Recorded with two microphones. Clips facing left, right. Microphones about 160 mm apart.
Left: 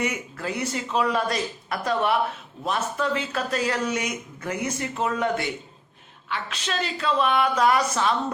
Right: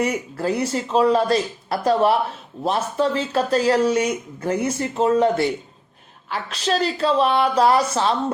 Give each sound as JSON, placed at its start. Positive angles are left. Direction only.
{"t": 0.0, "sound": "speech", "side_deg": -35}